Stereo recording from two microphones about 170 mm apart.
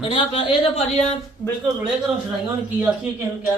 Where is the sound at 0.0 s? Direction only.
35° left (ahead or behind).